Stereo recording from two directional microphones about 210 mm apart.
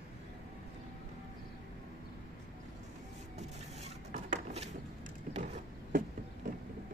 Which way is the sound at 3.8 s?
35° right (ahead or behind).